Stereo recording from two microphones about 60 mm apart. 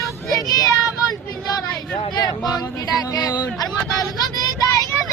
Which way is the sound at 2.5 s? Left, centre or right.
Left.